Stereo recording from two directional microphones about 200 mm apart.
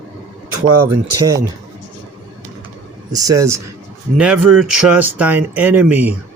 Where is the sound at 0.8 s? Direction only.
15° right (ahead or behind).